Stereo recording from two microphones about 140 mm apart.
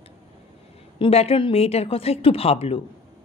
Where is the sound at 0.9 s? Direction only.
40° left (ahead or behind).